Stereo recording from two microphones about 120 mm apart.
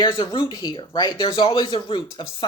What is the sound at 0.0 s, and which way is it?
Speech, 45° left (ahead or behind).